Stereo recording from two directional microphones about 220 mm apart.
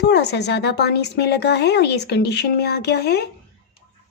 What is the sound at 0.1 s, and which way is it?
Speech, 50° left (ahead or behind).